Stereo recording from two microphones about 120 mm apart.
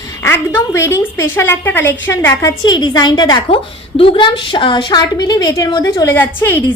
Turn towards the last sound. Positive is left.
turn(degrees=20)  # may be behind; listen again after turning